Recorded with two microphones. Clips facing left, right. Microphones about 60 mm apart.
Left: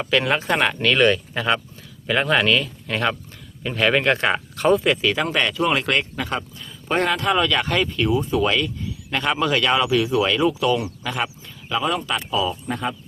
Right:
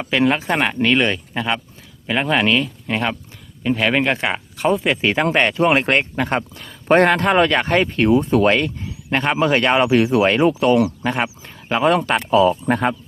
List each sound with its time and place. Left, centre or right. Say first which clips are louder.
0.0 s speech: right 3 dB; centre
1.3 s speech: even; centre
4.9 s speech: right 2 dB; right
9.0 s a man's voice: right 4 dB; right
11.7 s speech: right 6 dB; right
11.9 s speech: right 8 dB; right